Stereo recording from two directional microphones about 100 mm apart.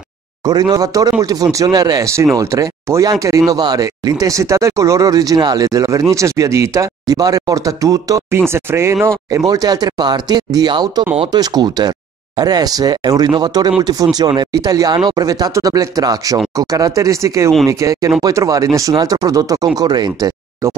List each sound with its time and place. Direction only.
0.4 s speech: 40° right (ahead or behind)
8.4 s speech: 25° right (ahead or behind)
9.5 s speech: 40° right (ahead or behind)
20.6 s speech: 30° right (ahead or behind)